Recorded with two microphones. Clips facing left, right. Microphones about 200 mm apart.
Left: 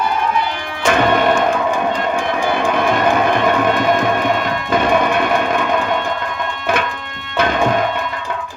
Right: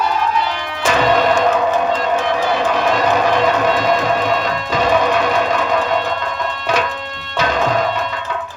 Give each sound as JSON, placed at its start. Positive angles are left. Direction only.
{"t": 0.9, "sound": "music", "side_deg": 55}
{"t": 2.5, "sound": "music", "side_deg": 55}
{"t": 7.3, "sound": "music", "side_deg": 55}